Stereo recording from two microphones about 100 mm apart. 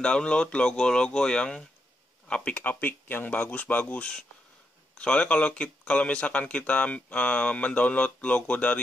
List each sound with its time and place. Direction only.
0.0 s speech: 10° left (ahead or behind)